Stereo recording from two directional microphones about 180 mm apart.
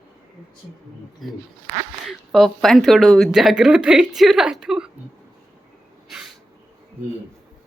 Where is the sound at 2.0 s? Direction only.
Centre (ahead or behind).